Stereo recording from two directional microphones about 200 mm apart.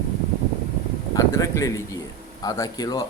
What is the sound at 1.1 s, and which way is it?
A man's voice, 15° left (ahead or behind).